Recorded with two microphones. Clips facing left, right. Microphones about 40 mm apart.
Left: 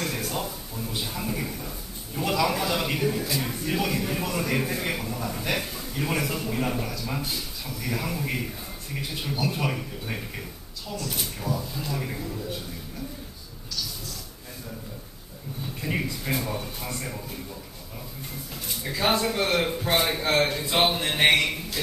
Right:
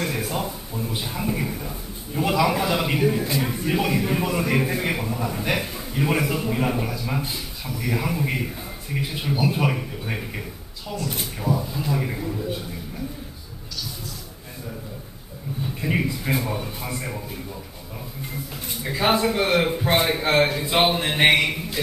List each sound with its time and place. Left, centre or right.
0.0 s a man's voice: centre
15.8 s a man's voice: centre
18.8 s a man's voice: centre